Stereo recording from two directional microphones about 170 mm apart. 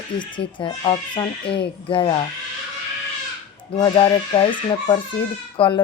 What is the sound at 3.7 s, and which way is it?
A woman's voice, 30° left (ahead or behind).